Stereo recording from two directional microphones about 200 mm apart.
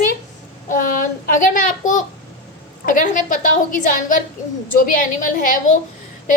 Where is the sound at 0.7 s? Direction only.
40° left (ahead or behind).